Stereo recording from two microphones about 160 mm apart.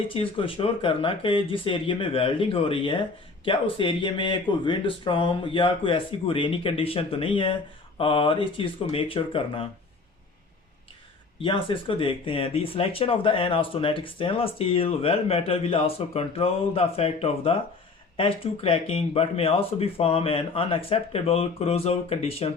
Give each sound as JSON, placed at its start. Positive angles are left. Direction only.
{"t": 0.1, "sound": "speech", "side_deg": 35}
{"t": 11.3, "sound": "speech", "side_deg": 30}